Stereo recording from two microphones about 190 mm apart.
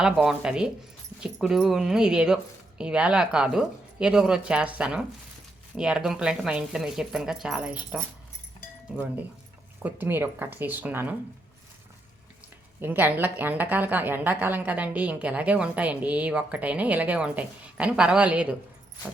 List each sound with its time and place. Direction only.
0.0 s a woman's voice: 5° right (ahead or behind)
9.8 s a woman's voice: 10° right (ahead or behind)
12.8 s a woman's voice: 10° right (ahead or behind)